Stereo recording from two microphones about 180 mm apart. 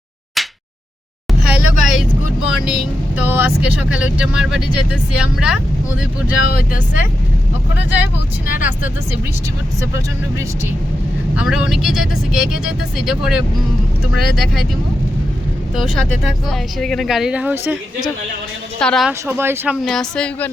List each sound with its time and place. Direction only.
0.4 s a sound: centre (ahead or behind)
1.3 s vehicle: centre (ahead or behind)
3.2 s speech: 10° right (ahead or behind)
6.4 s speech: 60° left (ahead or behind)
8.4 s speech: 45° left (ahead or behind)
11.3 s speech: 5° right (ahead or behind)
15.7 s speech: centre (ahead or behind)
18.8 s speech: 5° left (ahead or behind)
19.4 s speech: 10° right (ahead or behind)
19.8 s speech: 5° left (ahead or behind)